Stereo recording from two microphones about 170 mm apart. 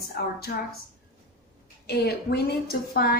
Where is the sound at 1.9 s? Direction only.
70° left (ahead or behind).